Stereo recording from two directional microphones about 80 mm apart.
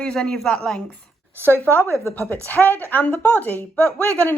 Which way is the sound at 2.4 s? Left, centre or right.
Left.